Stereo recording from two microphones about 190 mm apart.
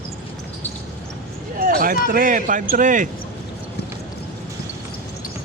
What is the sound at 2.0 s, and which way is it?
A man's voice, 45° right (ahead or behind).